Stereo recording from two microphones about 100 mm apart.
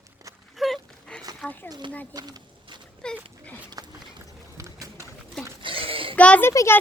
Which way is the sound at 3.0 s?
10° left (ahead or behind).